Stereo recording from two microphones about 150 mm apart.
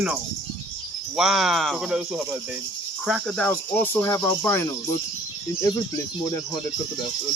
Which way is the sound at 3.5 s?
15° left (ahead or behind).